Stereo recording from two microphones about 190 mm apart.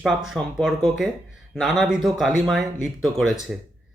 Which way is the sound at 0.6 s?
Centre (ahead or behind).